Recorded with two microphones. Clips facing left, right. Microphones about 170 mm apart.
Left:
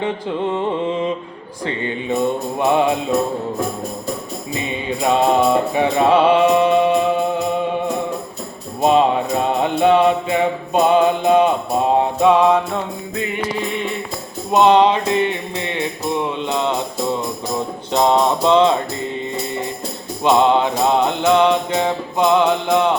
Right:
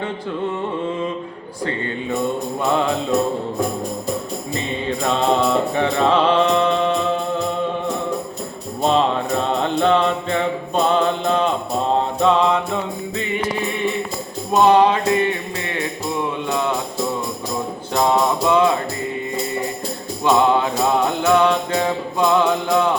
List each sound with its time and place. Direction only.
0.0 s music: 20° left (ahead or behind)
4.5 s music: 10° left (ahead or behind)
8.8 s music: 10° left (ahead or behind)
14.5 s music: 20° left (ahead or behind)
17.9 s music: 20° left (ahead or behind)
20.2 s music: 20° left (ahead or behind)